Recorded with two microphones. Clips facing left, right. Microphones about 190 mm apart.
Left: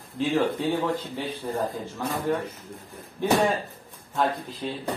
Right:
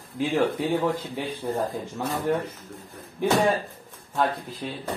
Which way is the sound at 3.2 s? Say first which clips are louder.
Even; 15° right (ahead or behind).